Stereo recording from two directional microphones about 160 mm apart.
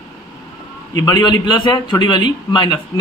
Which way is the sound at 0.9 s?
25° left (ahead or behind).